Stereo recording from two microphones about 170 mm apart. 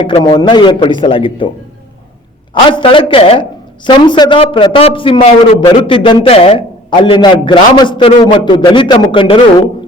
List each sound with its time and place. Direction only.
0.0 s a man's voice: 30° left (ahead or behind)
2.6 s a woman's voice: 30° left (ahead or behind)